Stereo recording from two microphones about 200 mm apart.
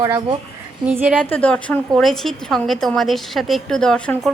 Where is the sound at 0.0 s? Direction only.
20° right (ahead or behind).